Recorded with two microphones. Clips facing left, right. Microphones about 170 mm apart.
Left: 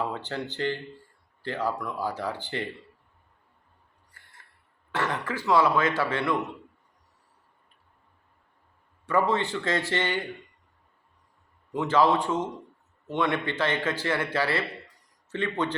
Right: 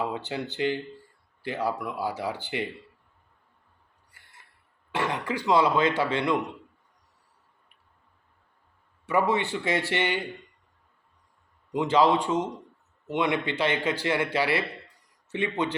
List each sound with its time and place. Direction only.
0.0 s speech: 10° right (ahead or behind)
4.9 s speech: 15° right (ahead or behind)
9.0 s speech: 10° right (ahead or behind)
11.7 s speech: 15° right (ahead or behind)